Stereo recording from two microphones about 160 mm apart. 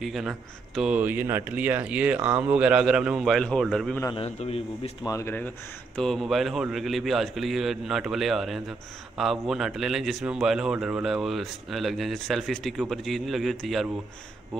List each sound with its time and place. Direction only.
0.0 s a man's voice: centre (ahead or behind)
4.1 s a man's voice: 35° left (ahead or behind)
5.0 s speech: 15° left (ahead or behind)
5.9 s a man's voice: centre (ahead or behind)